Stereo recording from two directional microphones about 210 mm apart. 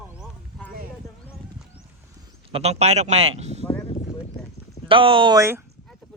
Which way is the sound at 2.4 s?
30° right (ahead or behind).